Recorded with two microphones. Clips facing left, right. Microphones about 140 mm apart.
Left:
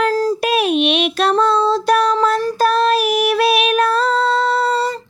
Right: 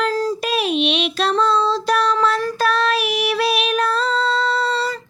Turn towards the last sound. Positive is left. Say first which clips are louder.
# left 4 dB
turn(degrees=50)  # may be behind; listen again after turning